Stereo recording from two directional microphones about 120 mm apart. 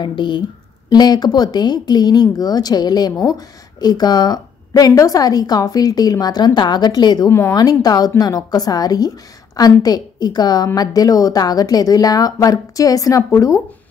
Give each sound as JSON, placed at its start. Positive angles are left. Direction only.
{"t": 0.0, "sound": "speech", "side_deg": 40}
{"t": 7.2, "sound": "speech", "side_deg": 20}
{"t": 7.5, "sound": "speech", "side_deg": 35}